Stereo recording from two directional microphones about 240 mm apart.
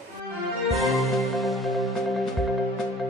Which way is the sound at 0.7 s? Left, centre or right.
Centre.